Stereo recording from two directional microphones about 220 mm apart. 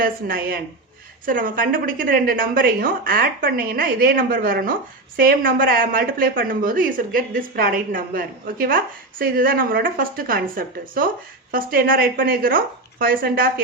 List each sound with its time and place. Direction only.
0.0 s a woman's voice: 40° right (ahead or behind)